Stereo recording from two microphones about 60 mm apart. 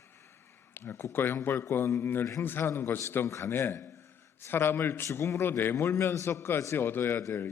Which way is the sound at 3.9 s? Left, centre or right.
Left.